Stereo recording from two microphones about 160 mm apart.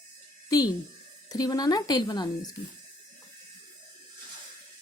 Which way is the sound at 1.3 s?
25° left (ahead or behind).